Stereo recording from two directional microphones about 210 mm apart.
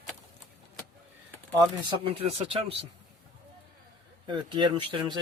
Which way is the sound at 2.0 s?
25° right (ahead or behind).